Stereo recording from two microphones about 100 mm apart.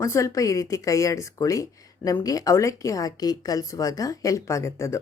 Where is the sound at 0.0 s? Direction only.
30° left (ahead or behind).